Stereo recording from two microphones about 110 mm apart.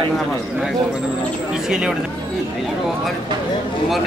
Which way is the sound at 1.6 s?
5° right (ahead or behind).